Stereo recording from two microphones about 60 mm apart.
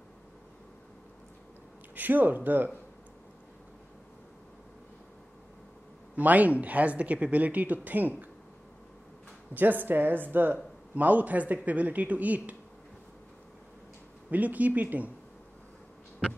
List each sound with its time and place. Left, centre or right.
2.0 s speech: right
6.1 s speech: right
9.5 s speech: right
14.3 s speech: right